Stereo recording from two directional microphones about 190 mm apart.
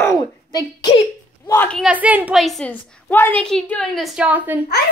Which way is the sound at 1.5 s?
10° left (ahead or behind).